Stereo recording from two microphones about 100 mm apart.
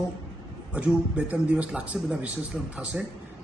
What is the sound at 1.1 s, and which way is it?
Speech, 15° right (ahead or behind).